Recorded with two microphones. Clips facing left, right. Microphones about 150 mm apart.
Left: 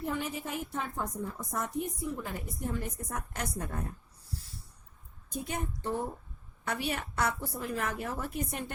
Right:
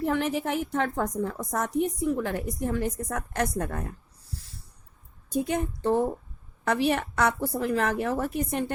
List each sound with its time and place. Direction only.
0.0 s a woman's voice: 85° right
5.3 s a woman's voice: 90° right; by 8.7 s 70° right (ahead or behind)